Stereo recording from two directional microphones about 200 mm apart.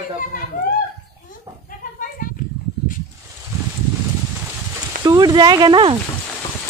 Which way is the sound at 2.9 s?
40° left (ahead or behind).